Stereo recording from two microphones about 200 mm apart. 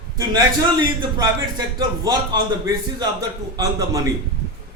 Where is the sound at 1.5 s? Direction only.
20° right (ahead or behind).